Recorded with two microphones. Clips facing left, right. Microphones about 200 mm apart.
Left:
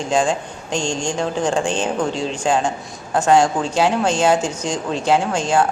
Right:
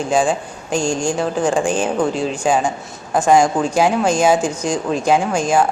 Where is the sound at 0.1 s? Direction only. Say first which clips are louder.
Right 1 dB; 10° right (ahead or behind).